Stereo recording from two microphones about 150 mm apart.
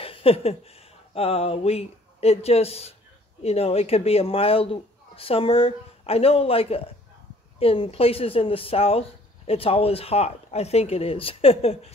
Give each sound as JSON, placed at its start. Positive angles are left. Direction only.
{"t": 0.0, "sound": "speech", "side_deg": 40}